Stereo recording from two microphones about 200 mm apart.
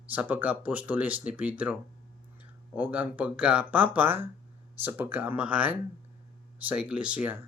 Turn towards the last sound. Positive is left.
turn(degrees=-10)  # may be behind; listen again after turning